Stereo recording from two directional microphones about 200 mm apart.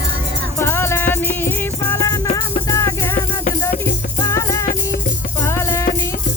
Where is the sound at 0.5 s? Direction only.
10° left (ahead or behind).